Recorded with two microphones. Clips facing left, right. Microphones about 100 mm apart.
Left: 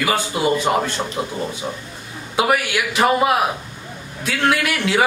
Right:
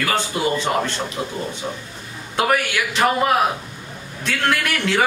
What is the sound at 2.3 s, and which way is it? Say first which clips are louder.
Speech: left 1 dB; 5° left (ahead or behind).